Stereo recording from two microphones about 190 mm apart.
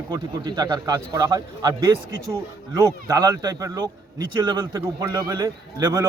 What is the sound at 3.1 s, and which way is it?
A man's voice, 20° right (ahead or behind).